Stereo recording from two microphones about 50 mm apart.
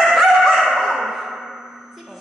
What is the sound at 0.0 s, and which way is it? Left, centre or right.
Music, centre.